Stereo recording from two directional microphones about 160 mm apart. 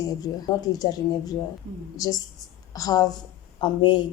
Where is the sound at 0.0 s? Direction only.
25° left (ahead or behind).